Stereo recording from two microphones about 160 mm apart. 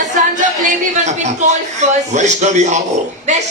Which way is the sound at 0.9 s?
45° right (ahead or behind).